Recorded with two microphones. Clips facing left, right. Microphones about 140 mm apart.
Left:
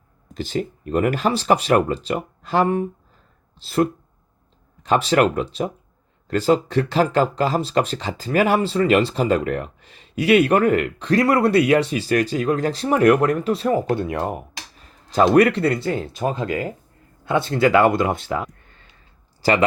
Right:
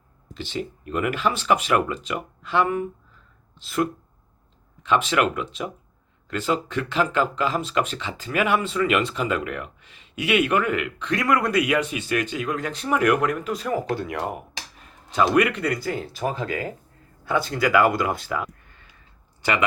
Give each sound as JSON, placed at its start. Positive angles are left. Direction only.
{"t": 0.3, "sound": "speech", "side_deg": 40}
{"t": 15.1, "sound": "speech", "side_deg": 35}